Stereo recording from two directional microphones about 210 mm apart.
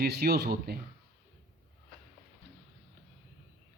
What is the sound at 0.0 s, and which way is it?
Speech, 50° right (ahead or behind).